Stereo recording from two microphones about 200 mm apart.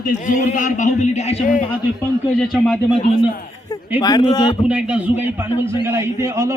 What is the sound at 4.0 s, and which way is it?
Speech, 20° left (ahead or behind).